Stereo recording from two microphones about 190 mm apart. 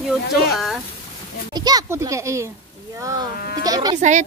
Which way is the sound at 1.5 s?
20° right (ahead or behind).